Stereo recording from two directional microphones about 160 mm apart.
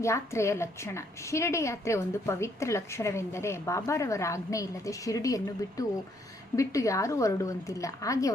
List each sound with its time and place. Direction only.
0.0 s a woman's voice: 20° left (ahead or behind)